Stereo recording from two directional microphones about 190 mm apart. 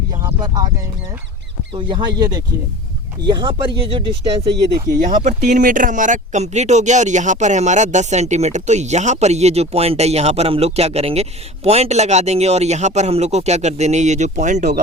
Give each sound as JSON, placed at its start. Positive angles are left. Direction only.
{"t": 0.2, "sound": "a sound", "side_deg": -20}
{"t": 1.7, "sound": "speech", "side_deg": -25}
{"t": 5.0, "sound": "speech", "side_deg": -40}